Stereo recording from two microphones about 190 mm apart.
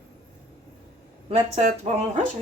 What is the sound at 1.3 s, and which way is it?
Speech, 35° right (ahead or behind).